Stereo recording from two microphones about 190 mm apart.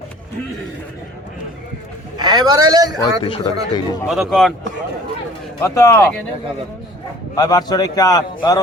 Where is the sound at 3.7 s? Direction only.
20° left (ahead or behind).